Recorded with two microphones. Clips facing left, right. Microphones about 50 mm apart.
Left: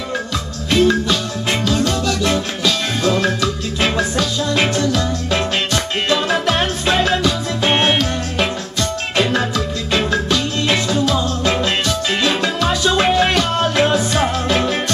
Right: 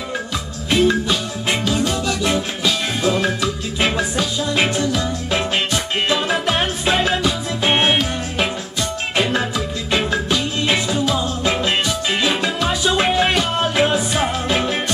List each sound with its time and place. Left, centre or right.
0.7 s music: right